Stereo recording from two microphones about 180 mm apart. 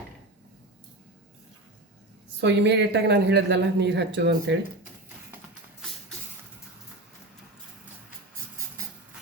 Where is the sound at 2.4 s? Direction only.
70° right (ahead or behind).